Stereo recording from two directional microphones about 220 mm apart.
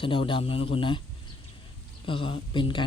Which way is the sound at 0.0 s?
25° left (ahead or behind).